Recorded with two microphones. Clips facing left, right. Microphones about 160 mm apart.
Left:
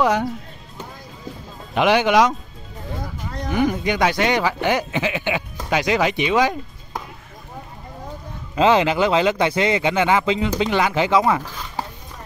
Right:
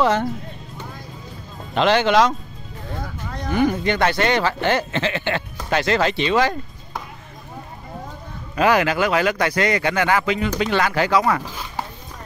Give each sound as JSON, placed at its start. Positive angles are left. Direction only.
{"t": 0.0, "sound": "speech", "side_deg": 10}
{"t": 1.8, "sound": "speech", "side_deg": 10}
{"t": 3.4, "sound": "speech", "side_deg": 15}
{"t": 8.5, "sound": "speech", "side_deg": 20}